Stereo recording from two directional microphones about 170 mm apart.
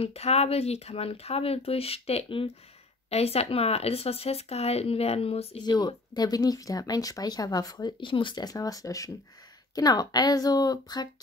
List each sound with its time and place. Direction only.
0.0 s speech: 40° left (ahead or behind)